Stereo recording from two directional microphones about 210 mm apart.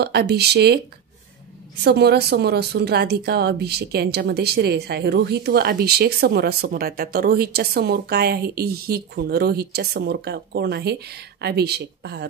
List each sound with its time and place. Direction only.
0.0 s speech: 50° right (ahead or behind)
1.8 s speech: 50° right (ahead or behind)